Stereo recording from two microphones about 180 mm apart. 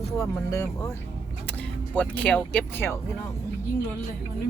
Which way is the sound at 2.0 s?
5° left (ahead or behind).